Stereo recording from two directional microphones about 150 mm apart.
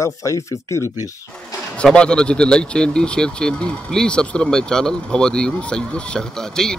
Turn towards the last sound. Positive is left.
turn(degrees=5)  # may be behind; listen again after turning